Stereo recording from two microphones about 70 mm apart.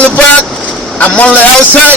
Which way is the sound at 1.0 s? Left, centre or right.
Centre.